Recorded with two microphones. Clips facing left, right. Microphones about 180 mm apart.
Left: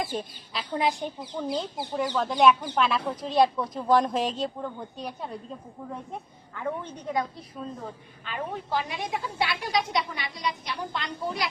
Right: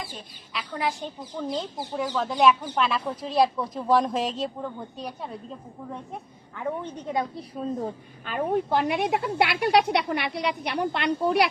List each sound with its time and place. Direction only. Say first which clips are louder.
0.5 s a woman's voice: left 2 dB; 20° left (ahead or behind)
1.4 s speech: even; 5° left (ahead or behind)
6.6 s a woman's voice: right 2 dB; 20° right (ahead or behind)
8.2 s a woman's voice: right 8 dB; 50° right (ahead or behind); by 11.4 s 65° right (ahead or behind)